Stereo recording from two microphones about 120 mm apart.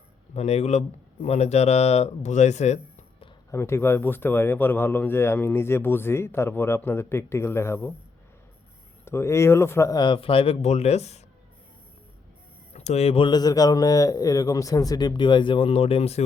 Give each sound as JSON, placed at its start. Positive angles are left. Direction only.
{"t": 0.3, "sound": "speech", "side_deg": 65}
{"t": 3.5, "sound": "speech", "side_deg": 20}
{"t": 9.0, "sound": "speech", "side_deg": 20}
{"t": 10.0, "sound": "speech", "side_deg": 45}
{"t": 12.7, "sound": "speech", "side_deg": 65}
{"t": 13.2, "sound": "a man's voice", "side_deg": 35}